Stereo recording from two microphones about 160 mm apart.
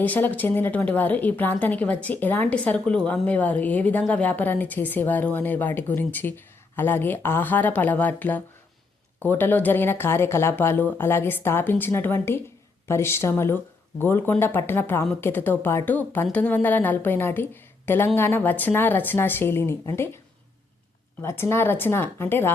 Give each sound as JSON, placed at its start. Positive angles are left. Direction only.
{"t": 0.0, "sound": "a woman's voice", "side_deg": 10}
{"t": 21.2, "sound": "a woman's voice", "side_deg": 15}